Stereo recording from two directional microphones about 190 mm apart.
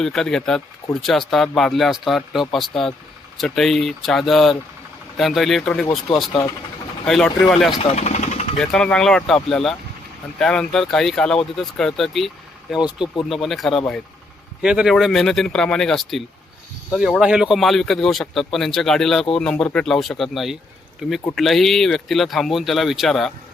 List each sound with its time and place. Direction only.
0.0 s speech: centre (ahead or behind)
7.8 s vehicle: 35° left (ahead or behind)
8.6 s speech: 5° left (ahead or behind)